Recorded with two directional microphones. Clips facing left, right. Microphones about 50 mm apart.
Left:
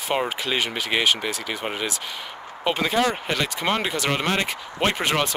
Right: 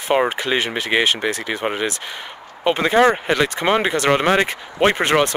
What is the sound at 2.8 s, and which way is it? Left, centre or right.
Speech, right.